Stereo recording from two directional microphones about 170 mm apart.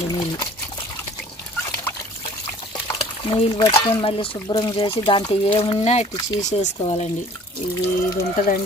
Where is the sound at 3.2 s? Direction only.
30° left (ahead or behind).